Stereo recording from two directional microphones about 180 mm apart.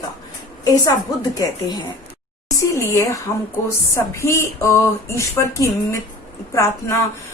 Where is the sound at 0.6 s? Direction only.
20° left (ahead or behind).